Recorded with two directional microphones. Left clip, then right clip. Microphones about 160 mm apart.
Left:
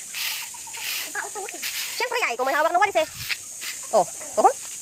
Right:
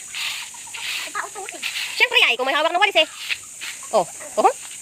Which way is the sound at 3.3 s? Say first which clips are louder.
Right 3 dB; 90° left.